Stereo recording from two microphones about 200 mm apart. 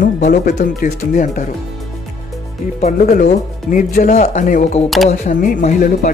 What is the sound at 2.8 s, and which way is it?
Speech, 40° left (ahead or behind).